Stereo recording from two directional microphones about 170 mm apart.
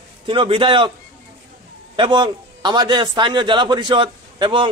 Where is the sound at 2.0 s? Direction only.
30° right (ahead or behind).